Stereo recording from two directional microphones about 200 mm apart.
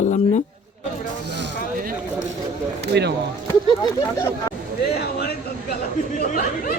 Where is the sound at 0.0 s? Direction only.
35° left (ahead or behind).